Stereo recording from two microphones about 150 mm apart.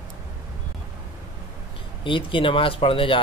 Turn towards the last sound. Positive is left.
turn(degrees=35)  # may be behind; listen again after turning